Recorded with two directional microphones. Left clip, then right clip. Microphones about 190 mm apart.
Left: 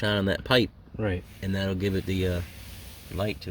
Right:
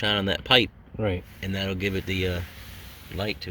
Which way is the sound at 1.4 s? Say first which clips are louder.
Right 1 dB; 45° left (ahead or behind).